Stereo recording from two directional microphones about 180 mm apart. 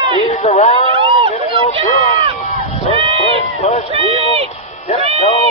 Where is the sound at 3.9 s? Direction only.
30° right (ahead or behind).